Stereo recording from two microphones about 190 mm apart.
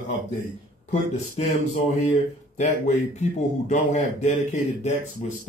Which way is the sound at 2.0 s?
35° left (ahead or behind).